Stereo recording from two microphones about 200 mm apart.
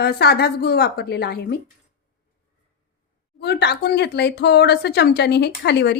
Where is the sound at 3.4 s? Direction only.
55° left (ahead or behind).